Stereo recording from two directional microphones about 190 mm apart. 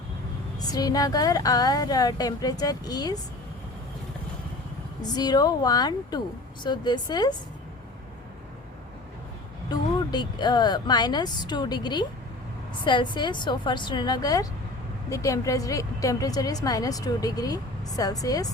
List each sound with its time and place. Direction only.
0.6 s a woman's voice: 20° left (ahead or behind)
5.0 s a woman's voice: 20° left (ahead or behind)
9.6 s a woman's voice: 20° left (ahead or behind)